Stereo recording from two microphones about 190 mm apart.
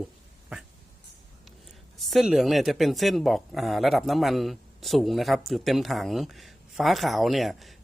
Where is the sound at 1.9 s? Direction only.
Centre (ahead or behind).